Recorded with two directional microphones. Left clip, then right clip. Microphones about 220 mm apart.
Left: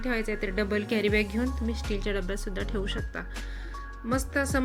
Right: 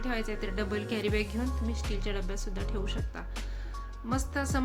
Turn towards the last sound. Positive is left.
turn(degrees=15)  # may be behind; listen again after turning